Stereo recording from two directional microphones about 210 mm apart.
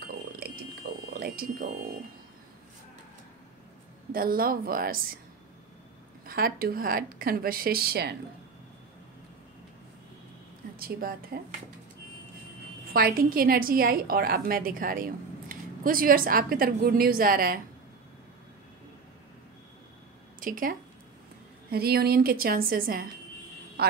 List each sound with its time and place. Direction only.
0.0 s a sound: 50° right (ahead or behind)
1.1 s speech: 45° right (ahead or behind)
4.1 s a woman's voice: 45° right (ahead or behind)
6.2 s a woman's voice: 45° right (ahead or behind)
10.8 s a woman's voice: 45° right (ahead or behind)
12.9 s a woman's voice: 45° right (ahead or behind)
20.3 s a woman's voice: 40° right (ahead or behind)
23.8 s quack: 50° right (ahead or behind)